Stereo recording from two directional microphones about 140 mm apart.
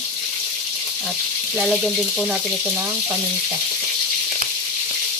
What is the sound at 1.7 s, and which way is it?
Speech, centre (ahead or behind).